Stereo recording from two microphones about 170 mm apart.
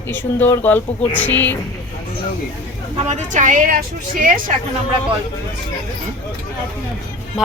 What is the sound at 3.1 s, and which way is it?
A woman's voice, 45° right (ahead or behind).